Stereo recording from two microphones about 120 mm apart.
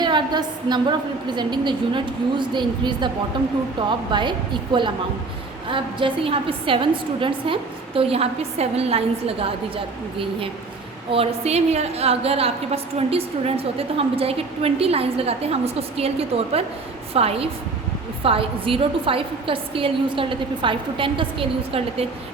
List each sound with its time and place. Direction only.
0.0 s a woman's voice: 40° right (ahead or behind)